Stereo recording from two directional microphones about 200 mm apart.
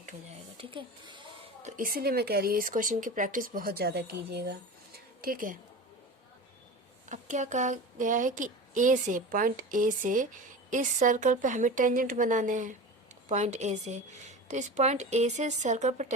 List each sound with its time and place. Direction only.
0.5 s speech: 25° right (ahead or behind)
1.6 s speech: 40° right (ahead or behind)
7.1 s a woman's voice: 40° right (ahead or behind)